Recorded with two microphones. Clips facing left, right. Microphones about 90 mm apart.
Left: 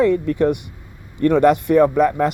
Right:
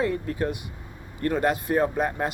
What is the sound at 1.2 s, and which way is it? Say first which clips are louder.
Speech: left 10 dB; 70° left (ahead or behind).